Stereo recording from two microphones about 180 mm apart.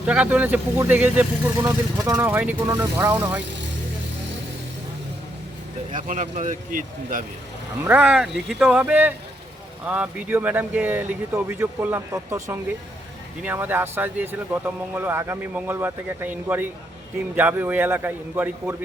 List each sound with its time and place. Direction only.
0.0 s speech: 5° right (ahead or behind)
5.9 s speech: 45° right (ahead or behind)
7.9 s speech: 10° right (ahead or behind)